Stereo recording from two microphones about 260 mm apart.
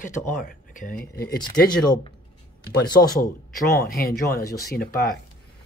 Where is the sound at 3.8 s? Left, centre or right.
Left.